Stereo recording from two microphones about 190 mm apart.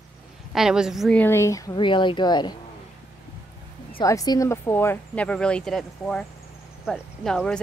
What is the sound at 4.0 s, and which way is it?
Speech, 20° left (ahead or behind).